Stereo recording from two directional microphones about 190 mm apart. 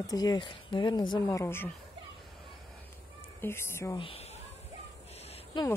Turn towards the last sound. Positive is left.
turn(degrees=25)  # may be behind; listen again after turning